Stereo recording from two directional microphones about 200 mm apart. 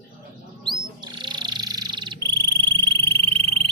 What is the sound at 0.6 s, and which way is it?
Frog, 20° right (ahead or behind).